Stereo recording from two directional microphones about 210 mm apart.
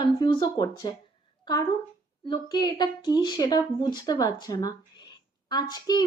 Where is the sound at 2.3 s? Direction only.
20° left (ahead or behind).